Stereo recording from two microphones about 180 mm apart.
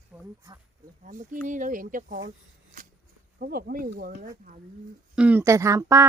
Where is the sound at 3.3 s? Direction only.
55° right (ahead or behind).